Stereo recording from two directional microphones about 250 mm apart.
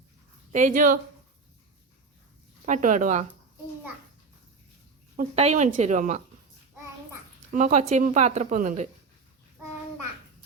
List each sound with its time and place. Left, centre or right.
0.5 s speech: right
2.6 s speech: right
5.1 s a woman's voice: right
7.5 s a woman's voice: right